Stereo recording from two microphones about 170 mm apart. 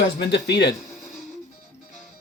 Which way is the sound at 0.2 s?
80° left.